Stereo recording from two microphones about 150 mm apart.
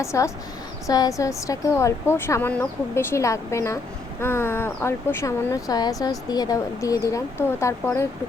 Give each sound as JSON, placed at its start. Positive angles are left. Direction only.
{"t": 0.0, "sound": "speech", "side_deg": 20}